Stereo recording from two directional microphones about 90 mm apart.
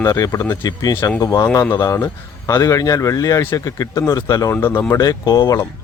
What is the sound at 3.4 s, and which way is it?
Speech, 30° left (ahead or behind).